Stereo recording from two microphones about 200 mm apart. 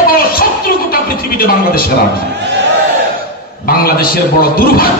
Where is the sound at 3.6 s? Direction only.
50° left (ahead or behind).